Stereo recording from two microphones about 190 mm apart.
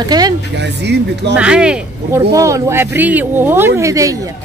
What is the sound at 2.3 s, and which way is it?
A woman's voice, 15° right (ahead or behind).